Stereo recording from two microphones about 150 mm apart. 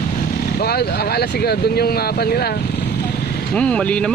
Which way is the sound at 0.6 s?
90° left.